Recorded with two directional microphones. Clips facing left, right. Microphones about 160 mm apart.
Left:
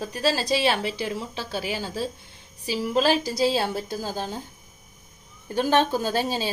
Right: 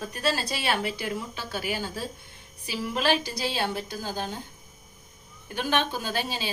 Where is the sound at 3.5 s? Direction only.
35° left (ahead or behind).